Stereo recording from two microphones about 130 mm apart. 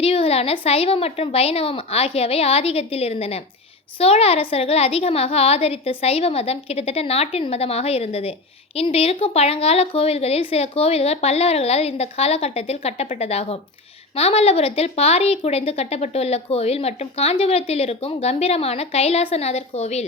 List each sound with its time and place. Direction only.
0.0 s a woman's voice: 50° left (ahead or behind)